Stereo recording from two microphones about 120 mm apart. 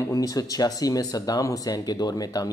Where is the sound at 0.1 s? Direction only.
30° left (ahead or behind).